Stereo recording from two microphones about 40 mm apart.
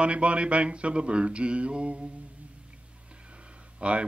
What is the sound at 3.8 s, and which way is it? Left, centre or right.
Speech, right.